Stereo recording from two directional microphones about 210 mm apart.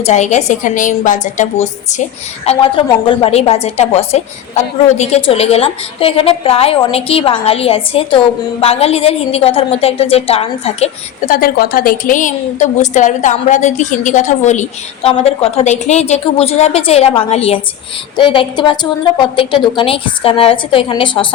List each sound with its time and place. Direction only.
0.0 s a woman's voice: 35° left (ahead or behind)
11.3 s a woman's voice: 45° left (ahead or behind); by 21.3 s 25° left (ahead or behind)